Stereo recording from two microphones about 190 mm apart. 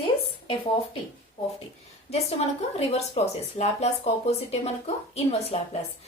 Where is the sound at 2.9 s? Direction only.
35° left (ahead or behind).